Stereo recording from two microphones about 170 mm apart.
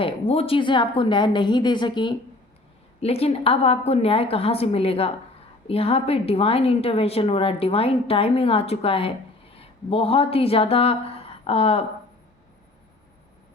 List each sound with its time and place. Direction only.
0.0 s a woman's voice: 35° left (ahead or behind)